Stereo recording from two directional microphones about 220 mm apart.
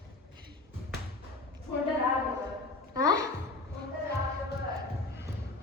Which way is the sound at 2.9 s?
15° right (ahead or behind).